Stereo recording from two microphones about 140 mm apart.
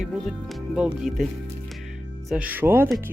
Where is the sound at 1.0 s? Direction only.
Centre (ahead or behind).